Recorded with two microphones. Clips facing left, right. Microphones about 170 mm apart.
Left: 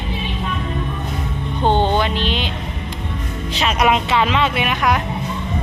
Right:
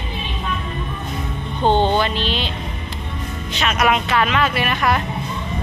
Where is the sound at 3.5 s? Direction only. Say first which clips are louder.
Left 2 dB; 30° left (ahead or behind); by 5.0 s 15° left (ahead or behind).